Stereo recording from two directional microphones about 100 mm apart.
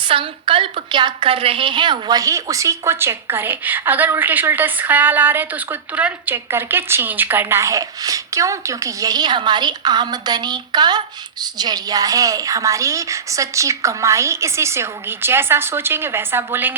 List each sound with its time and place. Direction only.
0.1 s a woman's voice: 60° right (ahead or behind)
2.1 s a woman's voice: 35° right (ahead or behind)
7.6 s a woman's voice: 35° right (ahead or behind)